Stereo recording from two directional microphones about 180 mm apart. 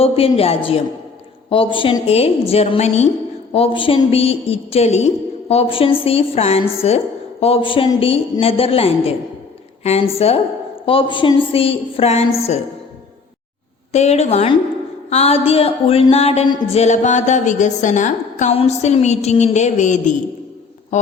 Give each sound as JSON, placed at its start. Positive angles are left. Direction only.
{"t": 0.0, "sound": "a woman's voice", "side_deg": 30}
{"t": 13.9, "sound": "a woman's voice", "side_deg": 40}